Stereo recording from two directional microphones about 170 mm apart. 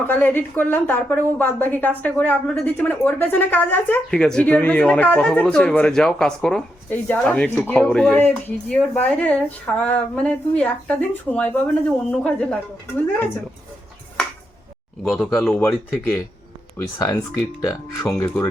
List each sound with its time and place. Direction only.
0.1 s a woman's voice: 10° left (ahead or behind)
15.0 s a woman's voice: 5° left (ahead or behind)